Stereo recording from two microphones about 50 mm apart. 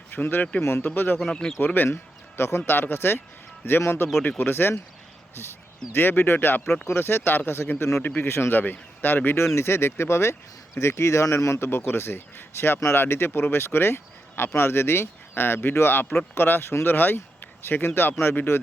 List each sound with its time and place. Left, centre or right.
0.1 s a man's voice: left
1.3 s speech: centre
1.5 s a man's voice: left
1.9 s speech: left
3.8 s a man's voice: left
5.9 s a man's voice: left
8.0 s a man's voice: left
9.6 s speech: left
10.8 s a man's voice: left